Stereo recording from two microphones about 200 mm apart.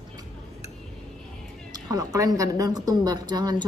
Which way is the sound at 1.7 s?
20° right (ahead or behind).